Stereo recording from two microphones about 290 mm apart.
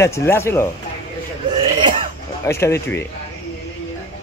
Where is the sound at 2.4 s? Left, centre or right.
Centre.